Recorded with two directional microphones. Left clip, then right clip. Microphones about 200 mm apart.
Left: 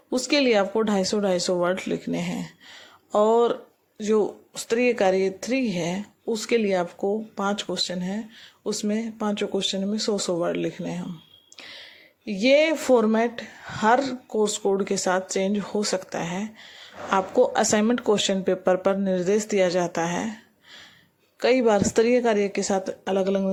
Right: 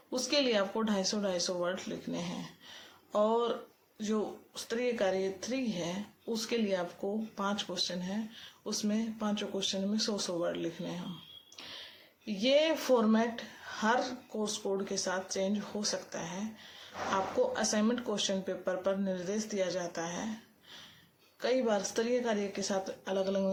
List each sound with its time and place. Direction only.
0.1 s speech: 35° left (ahead or behind)